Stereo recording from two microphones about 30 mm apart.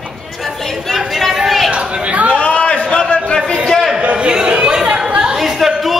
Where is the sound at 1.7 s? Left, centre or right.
Right.